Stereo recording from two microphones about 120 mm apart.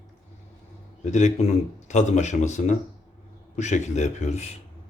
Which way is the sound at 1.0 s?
85° left.